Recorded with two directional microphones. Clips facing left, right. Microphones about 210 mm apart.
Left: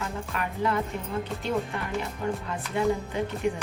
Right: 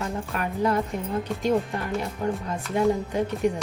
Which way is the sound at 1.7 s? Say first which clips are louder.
Right 3 dB; 40° right (ahead or behind).